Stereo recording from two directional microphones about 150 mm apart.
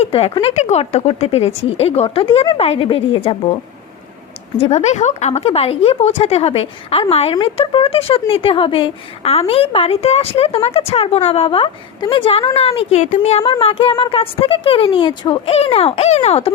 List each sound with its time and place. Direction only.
0.0 s speech: 40° left (ahead or behind)
4.5 s a woman's voice: 45° left (ahead or behind)